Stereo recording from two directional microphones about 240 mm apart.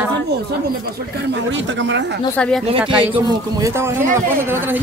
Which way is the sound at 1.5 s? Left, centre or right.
Right.